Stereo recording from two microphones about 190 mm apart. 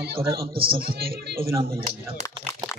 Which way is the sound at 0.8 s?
50° right (ahead or behind).